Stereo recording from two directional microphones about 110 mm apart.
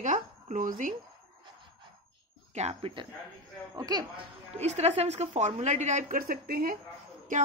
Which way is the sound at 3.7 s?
40° right (ahead or behind).